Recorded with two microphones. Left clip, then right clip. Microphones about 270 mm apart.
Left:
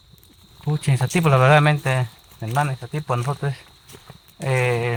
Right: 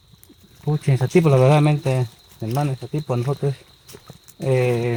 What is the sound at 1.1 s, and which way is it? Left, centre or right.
Speech, left.